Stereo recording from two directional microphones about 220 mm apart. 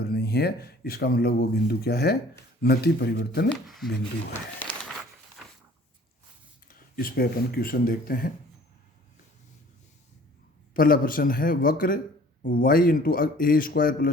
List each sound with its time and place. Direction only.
0.0 s speech: 45° left (ahead or behind)
3.5 s speech: centre (ahead or behind)
4.6 s crumpling: 10° left (ahead or behind)
6.7 s a man's voice: 40° left (ahead or behind)
10.8 s a man's voice: 40° left (ahead or behind)